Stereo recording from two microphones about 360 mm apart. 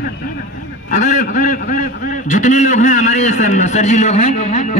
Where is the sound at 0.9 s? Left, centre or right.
Centre.